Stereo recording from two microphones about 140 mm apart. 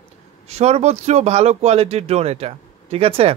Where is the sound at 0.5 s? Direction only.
50° right (ahead or behind).